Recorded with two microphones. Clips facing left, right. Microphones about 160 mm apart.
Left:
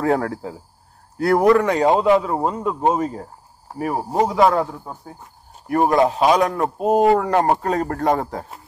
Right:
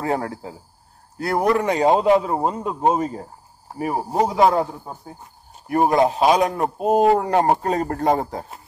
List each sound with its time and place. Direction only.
0.0 s speech: 10° right (ahead or behind)
1.5 s speech: 20° right (ahead or behind)
6.8 s speech: 5° right (ahead or behind)
7.2 s speech: 25° right (ahead or behind)